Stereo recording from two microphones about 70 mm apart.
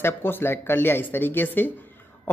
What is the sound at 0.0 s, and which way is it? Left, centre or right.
Speech, left.